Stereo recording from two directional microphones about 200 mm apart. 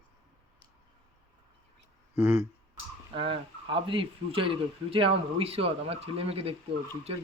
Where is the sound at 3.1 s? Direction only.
25° right (ahead or behind).